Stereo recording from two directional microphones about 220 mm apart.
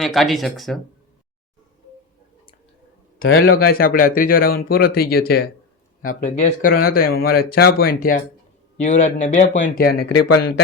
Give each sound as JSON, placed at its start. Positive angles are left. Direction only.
{"t": 0.0, "sound": "speech", "side_deg": 0}
{"t": 3.2, "sound": "a man's voice", "side_deg": 60}
{"t": 3.5, "sound": "speech", "side_deg": 45}
{"t": 10.0, "sound": "speech", "side_deg": 90}